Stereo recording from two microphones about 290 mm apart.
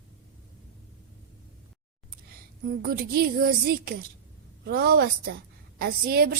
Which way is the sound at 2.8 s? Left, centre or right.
Right.